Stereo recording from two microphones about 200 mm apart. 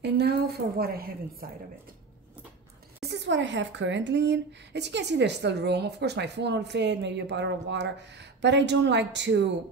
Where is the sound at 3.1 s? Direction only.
60° right (ahead or behind).